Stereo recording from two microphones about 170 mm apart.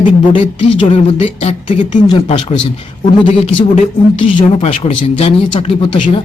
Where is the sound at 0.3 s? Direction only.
30° left (ahead or behind).